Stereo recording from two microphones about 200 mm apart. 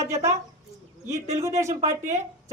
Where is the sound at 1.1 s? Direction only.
35° right (ahead or behind).